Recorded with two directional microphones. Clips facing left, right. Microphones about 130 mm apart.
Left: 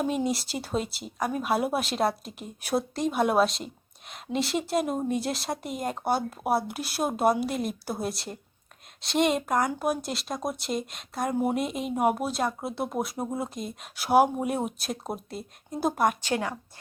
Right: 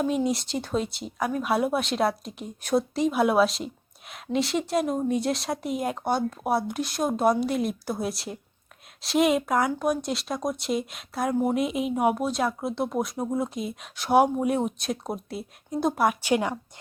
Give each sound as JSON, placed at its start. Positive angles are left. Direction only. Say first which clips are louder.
{"t": 0.3, "sound": "a woman's voice", "louder": "right 2 dB", "side_deg": 5}
{"t": 16.2, "sound": "a woman's voice", "louder": "right 5 dB", "side_deg": -15}